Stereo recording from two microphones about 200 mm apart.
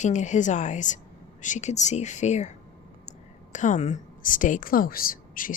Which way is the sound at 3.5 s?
35° left (ahead or behind).